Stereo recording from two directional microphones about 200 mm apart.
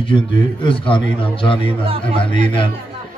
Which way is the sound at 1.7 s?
30° right (ahead or behind).